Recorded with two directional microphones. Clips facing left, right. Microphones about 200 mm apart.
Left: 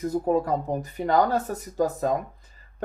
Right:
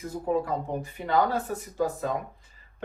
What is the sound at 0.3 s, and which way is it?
Speech, 40° left (ahead or behind).